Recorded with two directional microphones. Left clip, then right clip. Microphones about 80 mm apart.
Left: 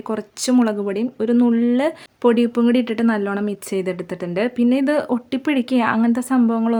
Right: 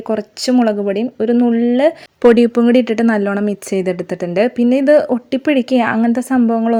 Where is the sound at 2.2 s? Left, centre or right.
Right.